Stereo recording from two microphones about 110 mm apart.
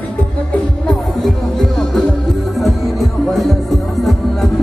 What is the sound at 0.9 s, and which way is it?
Music, 5° left (ahead or behind).